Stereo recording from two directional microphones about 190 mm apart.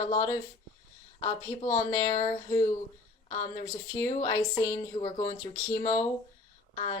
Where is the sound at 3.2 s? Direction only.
35° left (ahead or behind).